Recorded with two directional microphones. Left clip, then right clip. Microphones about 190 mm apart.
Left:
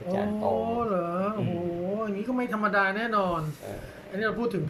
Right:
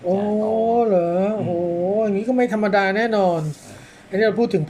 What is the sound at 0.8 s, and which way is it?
Speech, 25° right (ahead or behind).